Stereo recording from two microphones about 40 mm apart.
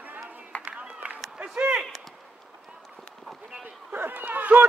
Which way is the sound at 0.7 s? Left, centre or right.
Right.